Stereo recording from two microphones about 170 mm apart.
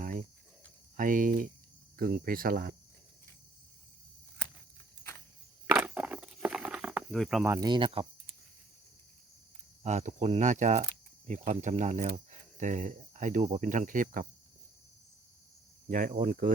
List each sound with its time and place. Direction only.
0.9 s speech: 50° right (ahead or behind)
5.6 s a sound: 5° right (ahead or behind)
7.4 s speech: 20° right (ahead or behind)
9.8 s speech: 45° right (ahead or behind)
15.9 s speech: 50° right (ahead or behind)